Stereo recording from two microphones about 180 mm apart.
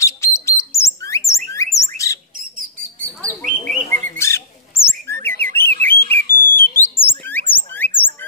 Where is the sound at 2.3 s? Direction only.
50° right (ahead or behind).